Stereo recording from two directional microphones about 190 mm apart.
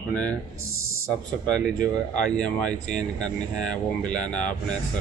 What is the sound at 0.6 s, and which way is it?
Speech, 90° left.